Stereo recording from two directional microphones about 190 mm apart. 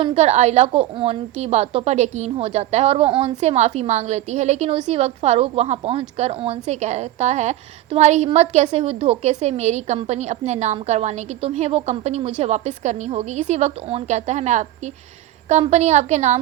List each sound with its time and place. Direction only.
0.0 s a woman's voice: 30° right (ahead or behind)